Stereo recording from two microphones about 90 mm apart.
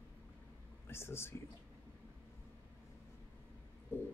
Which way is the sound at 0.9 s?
30° left (ahead or behind).